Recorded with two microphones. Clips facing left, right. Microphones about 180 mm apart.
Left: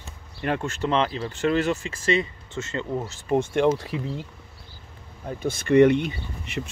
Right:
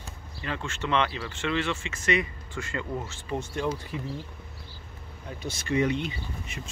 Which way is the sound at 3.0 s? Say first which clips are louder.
Left 4 dB; 40° left (ahead or behind).